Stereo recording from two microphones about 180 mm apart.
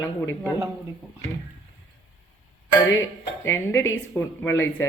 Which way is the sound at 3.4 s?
15° left (ahead or behind).